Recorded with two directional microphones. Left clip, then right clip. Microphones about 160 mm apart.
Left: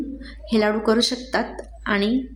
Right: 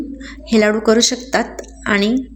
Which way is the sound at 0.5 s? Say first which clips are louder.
Right 6 dB; 15° right (ahead or behind).